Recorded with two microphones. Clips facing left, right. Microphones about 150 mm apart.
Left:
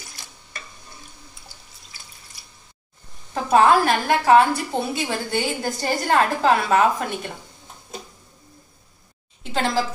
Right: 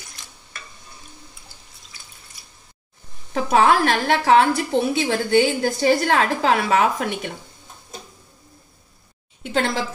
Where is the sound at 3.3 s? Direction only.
70° right (ahead or behind).